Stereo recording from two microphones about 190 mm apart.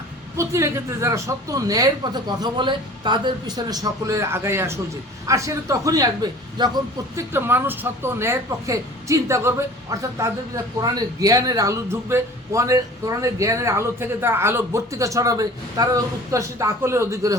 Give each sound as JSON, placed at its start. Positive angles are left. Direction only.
{"t": 0.3, "sound": "speech", "side_deg": -15}
{"t": 7.2, "sound": "speech", "side_deg": -10}